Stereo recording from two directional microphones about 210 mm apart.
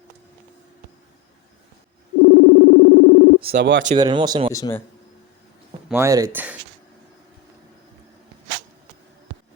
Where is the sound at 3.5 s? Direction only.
55° right (ahead or behind).